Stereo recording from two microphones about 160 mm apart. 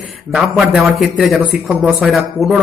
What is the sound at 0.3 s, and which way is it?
Speech, centre (ahead or behind).